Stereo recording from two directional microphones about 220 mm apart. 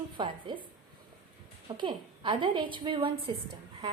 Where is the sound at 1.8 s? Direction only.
20° right (ahead or behind).